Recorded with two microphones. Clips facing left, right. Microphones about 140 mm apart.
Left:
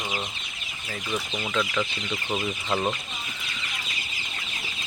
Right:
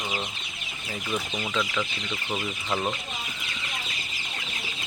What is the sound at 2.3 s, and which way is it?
Speech, 10° left (ahead or behind).